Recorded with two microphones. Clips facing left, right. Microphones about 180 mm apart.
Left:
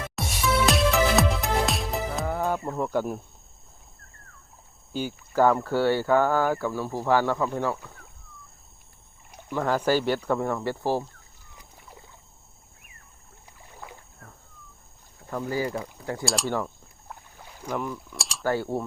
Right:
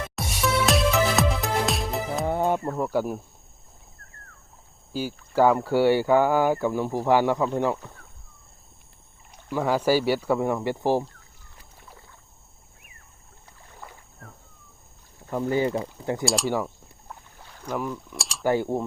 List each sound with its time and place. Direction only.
0.2 s music: centre (ahead or behind)
2.2 s music: 25° right (ahead or behind)
2.7 s speech: 5° right (ahead or behind)
4.9 s speech: 5° right (ahead or behind)
9.5 s speech: 10° right (ahead or behind)
11.5 s rowboat: 15° left (ahead or behind)
13.7 s rowboat: 10° left (ahead or behind)
15.3 s speech: 20° right (ahead or behind)
16.2 s speech: centre (ahead or behind)
16.5 s speech: 10° right (ahead or behind)
18.4 s speech: 15° right (ahead or behind)